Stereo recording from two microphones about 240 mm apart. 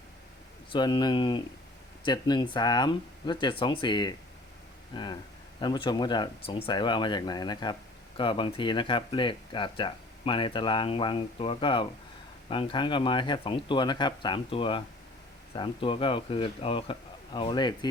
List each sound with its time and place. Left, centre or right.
0.7 s speech: centre